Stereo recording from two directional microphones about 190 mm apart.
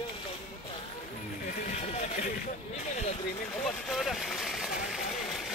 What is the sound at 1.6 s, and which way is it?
Speech, 35° left (ahead or behind).